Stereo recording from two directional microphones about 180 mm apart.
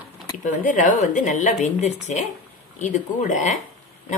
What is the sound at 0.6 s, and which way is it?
Speech, 45° left (ahead or behind).